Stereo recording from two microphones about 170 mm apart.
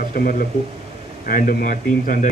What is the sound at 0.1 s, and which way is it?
Speech, 60° left (ahead or behind).